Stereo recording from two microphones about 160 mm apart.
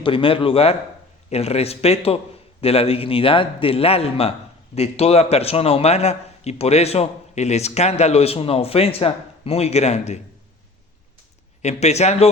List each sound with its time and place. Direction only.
0.0 s a man's voice: 35° left (ahead or behind)
11.6 s speech: 45° left (ahead or behind)